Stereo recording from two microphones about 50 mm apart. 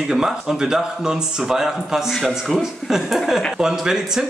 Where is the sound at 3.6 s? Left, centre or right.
Centre.